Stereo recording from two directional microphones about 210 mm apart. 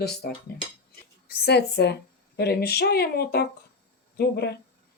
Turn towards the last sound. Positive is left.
turn(degrees=50)  # may be behind; listen again after turning